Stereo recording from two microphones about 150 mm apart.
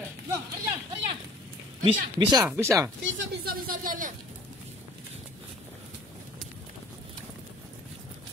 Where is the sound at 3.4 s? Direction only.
75° right (ahead or behind).